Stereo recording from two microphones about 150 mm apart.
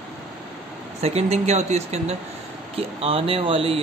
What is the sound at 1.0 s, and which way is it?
Speech, 45° right (ahead or behind).